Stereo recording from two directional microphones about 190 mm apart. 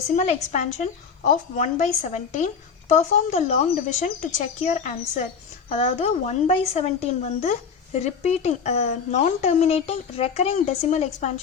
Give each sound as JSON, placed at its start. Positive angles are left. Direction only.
{"t": 0.2, "sound": "a woman's voice", "side_deg": 40}